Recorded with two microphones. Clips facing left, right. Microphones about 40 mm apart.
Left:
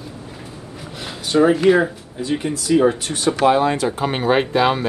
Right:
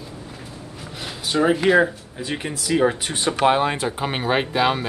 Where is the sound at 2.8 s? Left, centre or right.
Centre.